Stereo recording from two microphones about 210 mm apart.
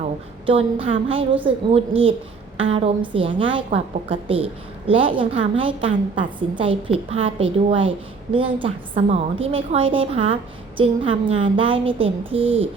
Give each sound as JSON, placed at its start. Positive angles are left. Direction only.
{"t": 0.4, "sound": "a woman's voice", "side_deg": -25}